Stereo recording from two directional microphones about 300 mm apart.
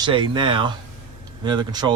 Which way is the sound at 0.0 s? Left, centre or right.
Centre.